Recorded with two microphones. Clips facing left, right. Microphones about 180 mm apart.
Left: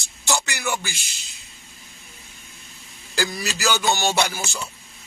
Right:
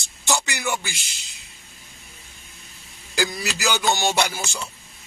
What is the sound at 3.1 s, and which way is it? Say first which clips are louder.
A man's voice: right 1 dB; 15° right (ahead or behind).